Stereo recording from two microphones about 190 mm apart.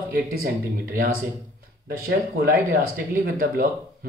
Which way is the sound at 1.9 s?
50° right (ahead or behind).